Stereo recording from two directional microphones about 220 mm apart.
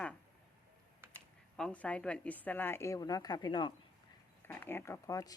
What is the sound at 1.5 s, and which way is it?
Speech, 5° left (ahead or behind).